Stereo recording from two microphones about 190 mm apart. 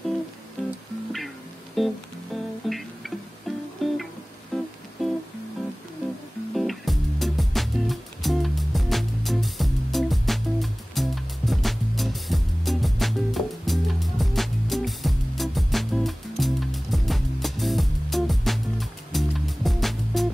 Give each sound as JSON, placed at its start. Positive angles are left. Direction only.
{"t": 1.8, "sound": "music", "side_deg": 0}
{"t": 6.5, "sound": "music", "side_deg": 0}